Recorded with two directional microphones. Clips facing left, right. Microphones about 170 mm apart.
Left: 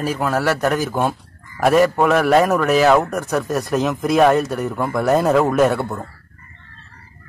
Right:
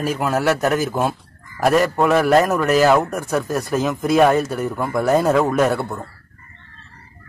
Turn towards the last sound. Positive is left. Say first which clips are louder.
# left 2 dB
turn(degrees=0)  # may be behind; listen again after turning